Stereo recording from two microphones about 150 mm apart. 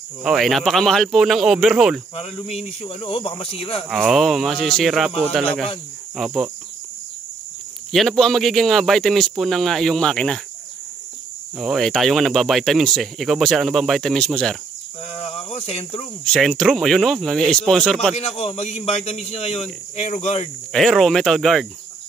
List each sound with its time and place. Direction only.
0.2 s speech: centre (ahead or behind)
2.1 s speech: 40° left (ahead or behind)
3.9 s speech: 5° right (ahead or behind)
7.9 s speech: centre (ahead or behind)
11.5 s speech: centre (ahead or behind)
15.1 s cricket: 45° left (ahead or behind)
16.3 s speech: 5° left (ahead or behind)
18.1 s speech: 45° left (ahead or behind)
20.7 s speech: centre (ahead or behind)